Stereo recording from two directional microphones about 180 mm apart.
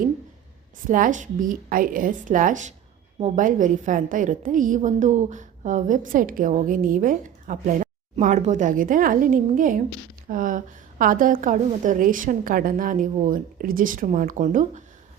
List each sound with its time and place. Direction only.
0.9 s a woman's voice: 45° right (ahead or behind)